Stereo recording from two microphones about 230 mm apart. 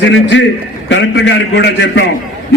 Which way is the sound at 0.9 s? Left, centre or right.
Left.